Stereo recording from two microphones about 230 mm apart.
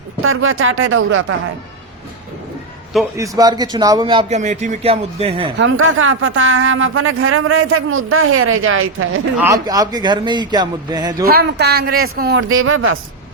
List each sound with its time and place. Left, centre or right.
0.2 s speech: right
3.2 s a man's voice: centre
5.5 s speech: right
9.4 s a man's voice: centre
11.3 s a man's voice: right